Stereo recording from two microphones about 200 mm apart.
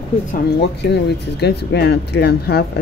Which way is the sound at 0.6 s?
55° left (ahead or behind).